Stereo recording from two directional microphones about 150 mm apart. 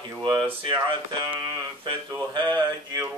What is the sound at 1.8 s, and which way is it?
Speech, 30° right (ahead or behind).